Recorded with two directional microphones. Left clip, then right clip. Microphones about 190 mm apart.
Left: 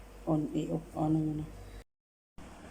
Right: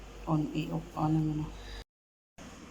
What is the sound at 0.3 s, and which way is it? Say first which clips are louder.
Speech: left 1 dB; 30° left (ahead or behind).